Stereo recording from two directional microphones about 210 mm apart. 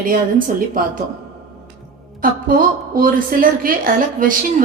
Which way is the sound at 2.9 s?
40° right (ahead or behind).